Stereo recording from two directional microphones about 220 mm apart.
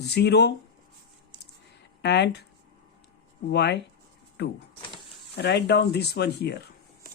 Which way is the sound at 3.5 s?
50° left (ahead or behind).